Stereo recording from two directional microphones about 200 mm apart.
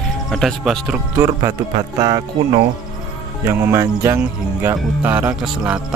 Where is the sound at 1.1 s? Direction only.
15° right (ahead or behind).